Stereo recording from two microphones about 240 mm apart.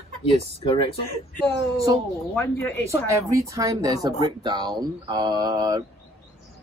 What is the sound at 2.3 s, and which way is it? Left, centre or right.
Speech, centre.